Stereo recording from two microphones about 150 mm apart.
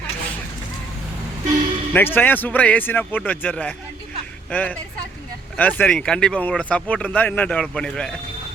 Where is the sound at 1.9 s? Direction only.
10° left (ahead or behind).